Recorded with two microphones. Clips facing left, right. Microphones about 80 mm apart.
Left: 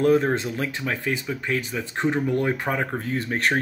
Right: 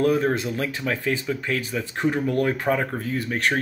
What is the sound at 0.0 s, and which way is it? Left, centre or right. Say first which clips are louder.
Speech: left 1 dB; left.